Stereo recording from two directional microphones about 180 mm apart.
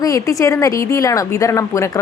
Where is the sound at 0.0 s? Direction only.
20° left (ahead or behind).